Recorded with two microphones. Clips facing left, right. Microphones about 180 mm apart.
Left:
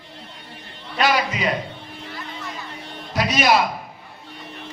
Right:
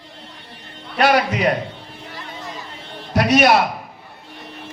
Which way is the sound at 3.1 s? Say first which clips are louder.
Right 4 dB; 60° right (ahead or behind).